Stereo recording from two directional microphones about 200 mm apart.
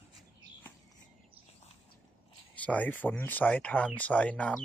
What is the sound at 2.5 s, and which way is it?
Speech, 5° left (ahead or behind).